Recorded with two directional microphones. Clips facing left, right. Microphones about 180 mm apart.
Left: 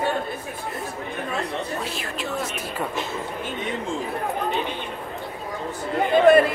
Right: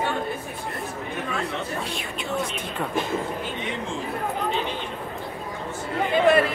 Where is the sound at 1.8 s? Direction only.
Centre (ahead or behind).